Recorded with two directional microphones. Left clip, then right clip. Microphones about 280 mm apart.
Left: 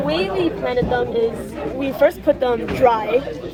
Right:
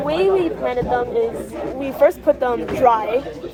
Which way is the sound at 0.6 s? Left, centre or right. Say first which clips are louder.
Left 1 dB; centre.